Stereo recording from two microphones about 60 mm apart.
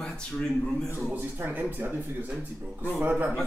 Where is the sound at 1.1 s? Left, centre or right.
Right.